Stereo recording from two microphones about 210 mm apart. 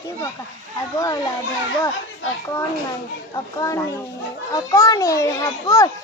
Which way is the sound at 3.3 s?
15° left (ahead or behind).